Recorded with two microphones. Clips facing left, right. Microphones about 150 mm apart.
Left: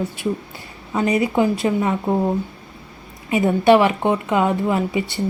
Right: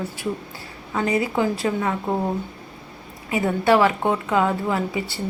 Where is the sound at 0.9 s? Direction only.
20° left (ahead or behind).